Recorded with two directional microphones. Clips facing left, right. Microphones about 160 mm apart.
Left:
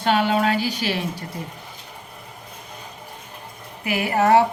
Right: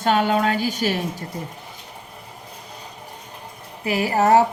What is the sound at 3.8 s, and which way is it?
Speech, 35° right (ahead or behind).